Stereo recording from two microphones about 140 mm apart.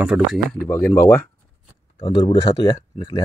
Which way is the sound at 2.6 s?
30° left (ahead or behind).